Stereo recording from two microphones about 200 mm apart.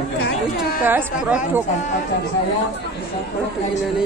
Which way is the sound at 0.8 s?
10° right (ahead or behind).